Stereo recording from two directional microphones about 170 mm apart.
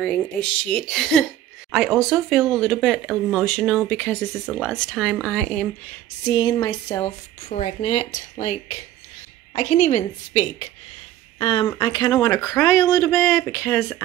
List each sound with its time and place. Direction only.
0.0 s speech: 5° left (ahead or behind)
6.2 s speech: 30° left (ahead or behind)
7.4 s a woman's voice: 45° left (ahead or behind)
11.6 s speech: 20° left (ahead or behind)